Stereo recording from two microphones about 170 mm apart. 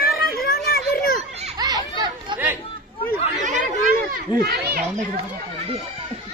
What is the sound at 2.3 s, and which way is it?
Chatter, 10° right (ahead or behind).